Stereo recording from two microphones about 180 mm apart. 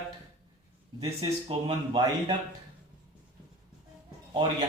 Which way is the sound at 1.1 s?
35° right (ahead or behind).